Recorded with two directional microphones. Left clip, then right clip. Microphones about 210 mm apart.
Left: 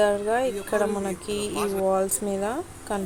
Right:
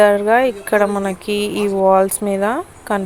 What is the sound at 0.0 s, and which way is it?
A woman's voice, 25° right (ahead or behind).